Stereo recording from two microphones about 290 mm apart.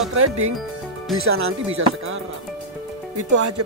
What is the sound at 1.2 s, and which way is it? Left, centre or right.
Speech, right.